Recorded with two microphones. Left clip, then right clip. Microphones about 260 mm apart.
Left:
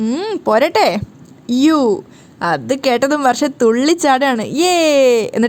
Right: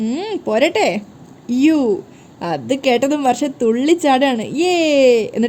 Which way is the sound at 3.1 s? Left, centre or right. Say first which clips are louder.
Left 3 dB; left.